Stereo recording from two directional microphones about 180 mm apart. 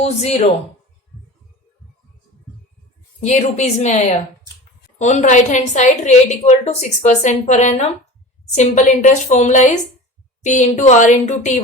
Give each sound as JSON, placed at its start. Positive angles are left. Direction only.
{"t": 0.0, "sound": "a woman's voice", "side_deg": 35}
{"t": 3.2, "sound": "a woman's voice", "side_deg": 40}